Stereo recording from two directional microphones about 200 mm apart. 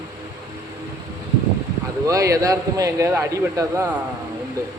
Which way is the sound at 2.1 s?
15° right (ahead or behind).